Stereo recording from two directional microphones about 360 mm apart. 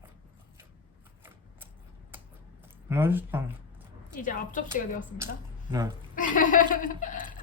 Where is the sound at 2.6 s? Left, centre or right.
Centre.